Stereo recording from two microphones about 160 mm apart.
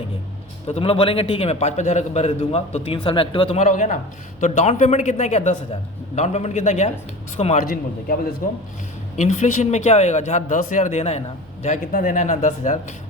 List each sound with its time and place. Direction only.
0.7 s a man's voice: 35° left (ahead or behind)
3.6 s a man's voice: 50° left (ahead or behind)
7.6 s a man's voice: 65° left (ahead or behind); by 11.2 s 45° left (ahead or behind)
11.6 s speech: 55° left (ahead or behind)